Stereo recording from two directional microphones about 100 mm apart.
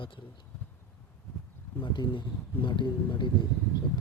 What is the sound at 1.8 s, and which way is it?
Speech, 50° left (ahead or behind).